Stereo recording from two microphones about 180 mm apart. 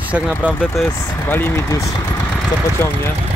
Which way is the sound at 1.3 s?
15° left (ahead or behind).